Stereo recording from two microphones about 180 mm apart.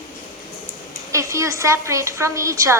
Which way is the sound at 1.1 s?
15° right (ahead or behind).